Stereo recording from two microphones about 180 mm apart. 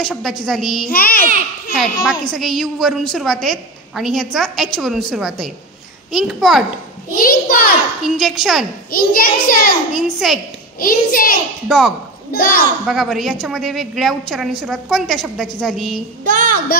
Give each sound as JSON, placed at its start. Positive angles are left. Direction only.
{"t": 0.0, "sound": "a woman's voice", "side_deg": 0}
{"t": 0.8, "sound": "a child's voice", "side_deg": 55}
{"t": 1.7, "sound": "a child's voice", "side_deg": 0}
{"t": 7.2, "sound": "a sound", "side_deg": 50}
{"t": 8.0, "sound": "a woman's voice", "side_deg": 0}
{"t": 8.9, "sound": "a child's voice", "side_deg": 55}
{"t": 9.9, "sound": "a woman's voice", "side_deg": 0}
{"t": 10.8, "sound": "a child's voice", "side_deg": 50}
{"t": 11.6, "sound": "a woman's voice", "side_deg": 0}
{"t": 12.3, "sound": "a woman's voice", "side_deg": 55}
{"t": 12.8, "sound": "a woman's voice", "side_deg": 0}
{"t": 16.3, "sound": "a child's voice", "side_deg": -50}